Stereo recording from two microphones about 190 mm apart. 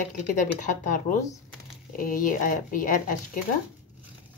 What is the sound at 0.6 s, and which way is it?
Speech, 45° left (ahead or behind).